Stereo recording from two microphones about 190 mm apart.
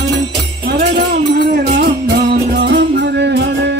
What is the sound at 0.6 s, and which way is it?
Music, 55° right (ahead or behind).